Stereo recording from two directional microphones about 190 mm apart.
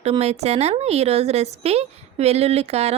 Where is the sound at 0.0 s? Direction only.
35° right (ahead or behind).